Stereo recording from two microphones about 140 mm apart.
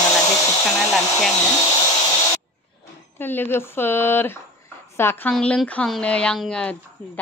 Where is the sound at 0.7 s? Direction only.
5° left (ahead or behind).